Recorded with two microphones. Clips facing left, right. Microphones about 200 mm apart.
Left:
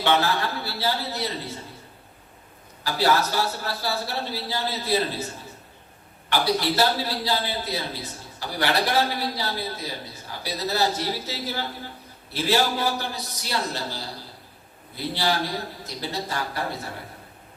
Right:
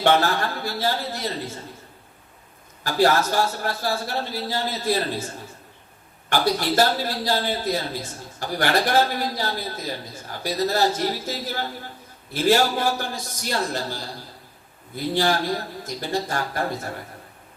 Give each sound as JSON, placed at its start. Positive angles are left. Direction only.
{"t": 0.0, "sound": "a man's voice", "side_deg": -50}
{"t": 2.8, "sound": "a man's voice", "side_deg": -45}
{"t": 6.3, "sound": "a man's voice", "side_deg": -45}